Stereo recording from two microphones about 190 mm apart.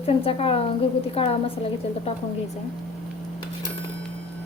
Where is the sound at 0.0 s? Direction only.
30° left (ahead or behind).